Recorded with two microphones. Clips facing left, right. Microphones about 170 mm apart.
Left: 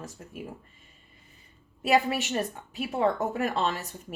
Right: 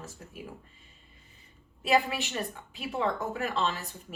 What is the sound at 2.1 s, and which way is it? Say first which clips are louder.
Speech: left 5 dB; 40° left (ahead or behind).